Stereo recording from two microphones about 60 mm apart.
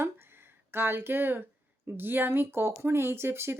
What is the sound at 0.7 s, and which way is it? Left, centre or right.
Speech, right.